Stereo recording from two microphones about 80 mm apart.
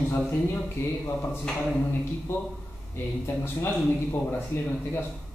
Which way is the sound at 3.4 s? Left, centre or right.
Left.